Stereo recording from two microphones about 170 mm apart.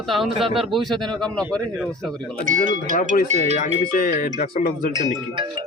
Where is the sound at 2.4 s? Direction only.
50° right (ahead or behind).